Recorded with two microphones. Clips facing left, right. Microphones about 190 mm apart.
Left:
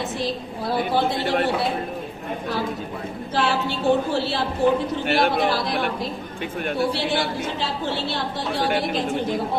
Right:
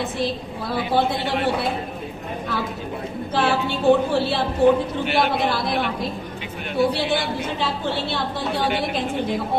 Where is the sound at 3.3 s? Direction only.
55° right (ahead or behind).